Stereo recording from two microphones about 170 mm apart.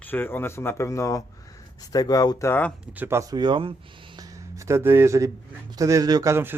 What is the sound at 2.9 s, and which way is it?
Speech, 10° right (ahead or behind).